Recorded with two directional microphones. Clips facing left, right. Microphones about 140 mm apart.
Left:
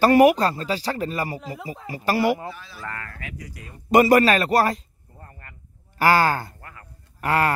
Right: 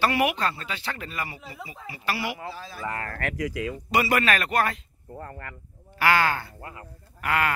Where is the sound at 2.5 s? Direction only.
35° right (ahead or behind).